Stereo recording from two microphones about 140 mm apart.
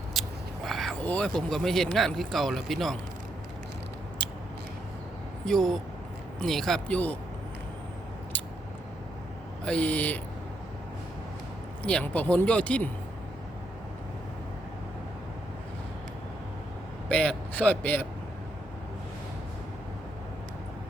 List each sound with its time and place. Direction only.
0.1 s whispering: centre (ahead or behind)
1.0 s speech: 10° left (ahead or behind)
5.5 s speech: 5° left (ahead or behind)
9.6 s speech: 10° left (ahead or behind)
11.8 s speech: 10° left (ahead or behind)
17.1 s a man's voice: 10° left (ahead or behind)